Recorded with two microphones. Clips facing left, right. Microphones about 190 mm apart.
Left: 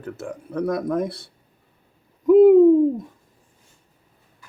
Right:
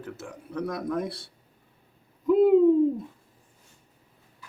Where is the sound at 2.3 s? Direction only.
50° left (ahead or behind).